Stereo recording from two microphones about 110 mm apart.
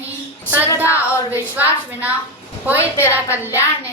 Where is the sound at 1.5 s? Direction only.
15° right (ahead or behind).